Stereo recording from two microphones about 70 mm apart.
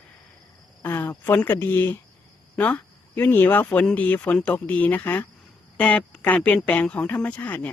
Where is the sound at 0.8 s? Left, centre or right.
Left.